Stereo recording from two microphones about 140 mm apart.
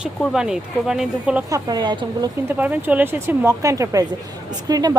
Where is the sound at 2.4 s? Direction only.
10° right (ahead or behind).